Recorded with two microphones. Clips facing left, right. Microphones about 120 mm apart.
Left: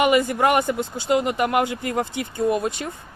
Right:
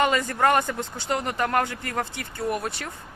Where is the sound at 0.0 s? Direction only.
15° left (ahead or behind).